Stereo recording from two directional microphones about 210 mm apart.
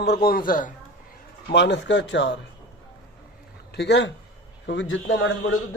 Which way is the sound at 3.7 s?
55° left (ahead or behind).